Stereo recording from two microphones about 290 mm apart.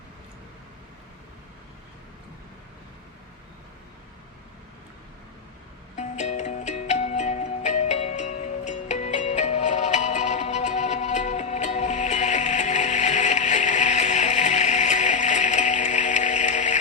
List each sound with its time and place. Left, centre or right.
6.0 s music: left